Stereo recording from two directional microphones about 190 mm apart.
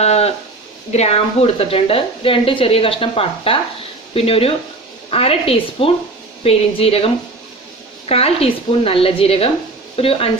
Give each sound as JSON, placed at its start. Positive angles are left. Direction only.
{"t": 0.0, "sound": "a woman's voice", "side_deg": 35}